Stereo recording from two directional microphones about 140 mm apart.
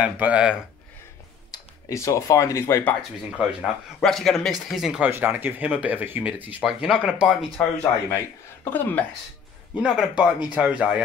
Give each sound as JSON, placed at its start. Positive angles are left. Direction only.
{"t": 0.0, "sound": "speech", "side_deg": -10}
{"t": 1.5, "sound": "speech", "side_deg": 25}
{"t": 4.0, "sound": "speech", "side_deg": 0}
{"t": 7.5, "sound": "speech", "side_deg": 10}
{"t": 9.8, "sound": "speech", "side_deg": -5}